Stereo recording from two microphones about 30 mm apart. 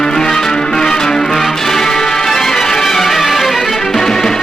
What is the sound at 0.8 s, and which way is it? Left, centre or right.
Music, centre.